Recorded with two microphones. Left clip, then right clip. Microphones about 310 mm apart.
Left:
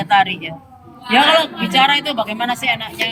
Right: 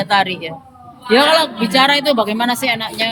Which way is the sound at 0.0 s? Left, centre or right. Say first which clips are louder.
Left 1 dB; centre.